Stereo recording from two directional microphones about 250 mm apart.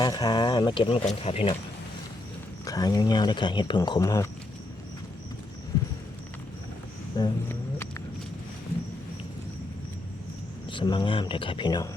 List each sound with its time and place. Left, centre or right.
0.0 s speech: centre
2.6 s speech: centre
7.2 s a sound: centre
10.7 s speech: centre